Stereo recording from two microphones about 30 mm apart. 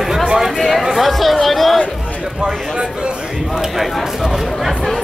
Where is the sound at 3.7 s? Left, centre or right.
Centre.